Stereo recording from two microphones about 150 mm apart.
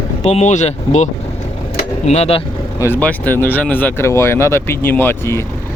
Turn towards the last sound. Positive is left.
turn(degrees=15)  # may be behind; listen again after turning